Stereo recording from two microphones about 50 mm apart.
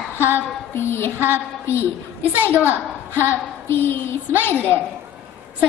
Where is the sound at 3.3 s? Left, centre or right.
Left.